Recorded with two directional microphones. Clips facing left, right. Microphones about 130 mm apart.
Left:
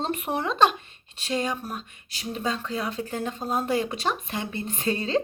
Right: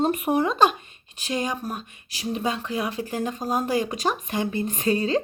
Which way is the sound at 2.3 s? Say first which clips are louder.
Right 2 dB; 20° right (ahead or behind).